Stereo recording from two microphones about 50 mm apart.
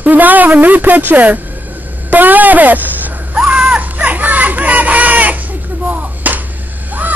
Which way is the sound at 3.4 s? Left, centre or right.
Centre.